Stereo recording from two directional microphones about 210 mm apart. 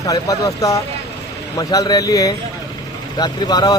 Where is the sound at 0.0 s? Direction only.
15° left (ahead or behind).